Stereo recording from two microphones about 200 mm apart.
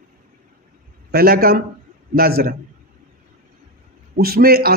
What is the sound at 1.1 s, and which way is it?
A man's voice, 50° right (ahead or behind).